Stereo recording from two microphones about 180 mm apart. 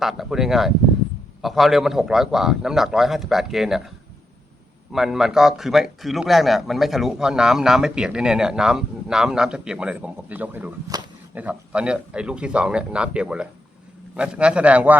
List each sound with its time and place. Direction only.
0.0 s a man's voice: centre (ahead or behind)